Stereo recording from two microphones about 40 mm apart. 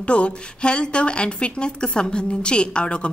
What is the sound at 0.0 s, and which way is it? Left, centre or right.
A woman's voice, left.